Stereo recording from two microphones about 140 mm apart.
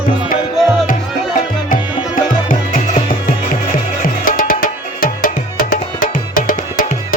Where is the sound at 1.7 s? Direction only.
75° left (ahead or behind).